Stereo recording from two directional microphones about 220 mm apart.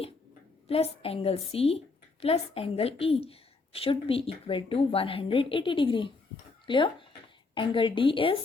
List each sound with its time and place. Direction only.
0.7 s a woman's voice: 25° left (ahead or behind)